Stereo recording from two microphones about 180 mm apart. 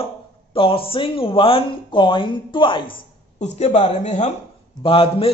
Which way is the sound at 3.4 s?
40° left (ahead or behind).